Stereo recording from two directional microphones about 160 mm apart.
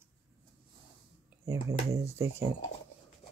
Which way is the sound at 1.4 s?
20° right (ahead or behind).